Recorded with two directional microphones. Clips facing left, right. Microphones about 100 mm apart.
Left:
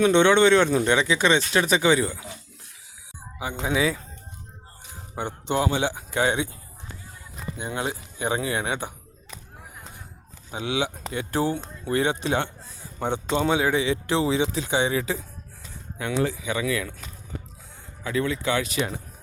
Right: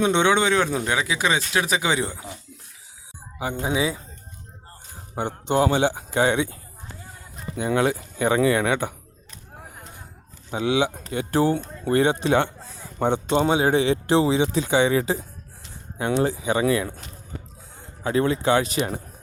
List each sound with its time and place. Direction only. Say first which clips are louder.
0.0 s speech: left 2 dB; 15° right (ahead or behind)
3.3 s a man's voice: right 3 dB; 45° right (ahead or behind)
3.7 s speech: left 1 dB; 25° right (ahead or behind)
5.1 s a man's voice: right 4 dB; 45° right (ahead or behind)
7.5 s speech: right 8 dB; 80° right; by 8.9 s 60° right (ahead or behind)
10.5 s a man's voice: right 5 dB; 40° right (ahead or behind)
18.0 s a man's voice: right 4 dB; 35° right (ahead or behind)